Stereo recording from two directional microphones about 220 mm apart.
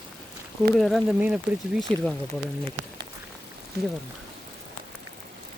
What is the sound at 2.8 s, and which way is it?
Speech, 55° right (ahead or behind).